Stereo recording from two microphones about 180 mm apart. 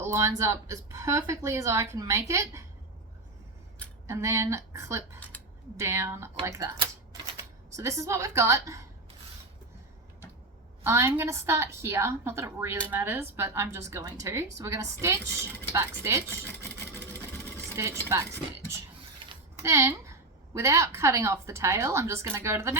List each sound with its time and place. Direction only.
0.0 s a woman's voice: 15° right (ahead or behind)
4.0 s a woman's voice: 15° right (ahead or behind)
7.8 s a woman's voice: 15° right (ahead or behind)
10.8 s a woman's voice: 15° right (ahead or behind)
17.7 s a woman's voice: 15° right (ahead or behind)
19.6 s a woman's voice: 15° right (ahead or behind)